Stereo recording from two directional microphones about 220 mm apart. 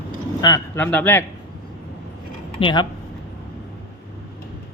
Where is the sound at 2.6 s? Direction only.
20° left (ahead or behind).